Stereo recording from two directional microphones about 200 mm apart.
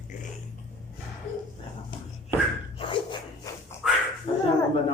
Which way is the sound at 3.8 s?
Centre (ahead or behind).